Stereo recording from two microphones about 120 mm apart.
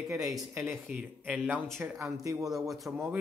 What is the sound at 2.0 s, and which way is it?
Speech, 25° right (ahead or behind).